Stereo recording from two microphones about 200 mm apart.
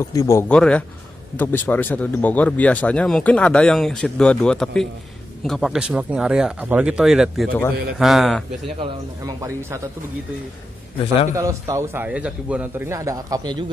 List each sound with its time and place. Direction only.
0.0 s speech: 15° left (ahead or behind)
8.7 s speech: 15° right (ahead or behind)
11.3 s speech: 15° right (ahead or behind)